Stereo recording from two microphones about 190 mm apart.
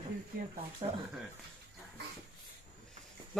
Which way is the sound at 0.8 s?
30° right (ahead or behind).